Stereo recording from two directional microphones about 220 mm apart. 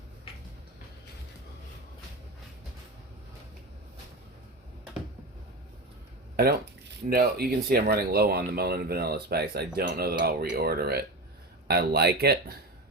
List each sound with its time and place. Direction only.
6.3 s speech: 45° right (ahead or behind)